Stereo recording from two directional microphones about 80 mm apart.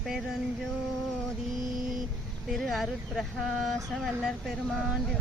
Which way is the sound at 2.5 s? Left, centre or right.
Centre.